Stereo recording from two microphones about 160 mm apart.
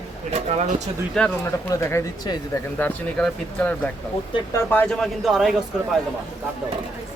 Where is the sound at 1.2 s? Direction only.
5° left (ahead or behind).